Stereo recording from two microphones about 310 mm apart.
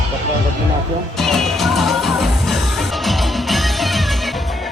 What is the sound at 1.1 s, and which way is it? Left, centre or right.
Music, centre.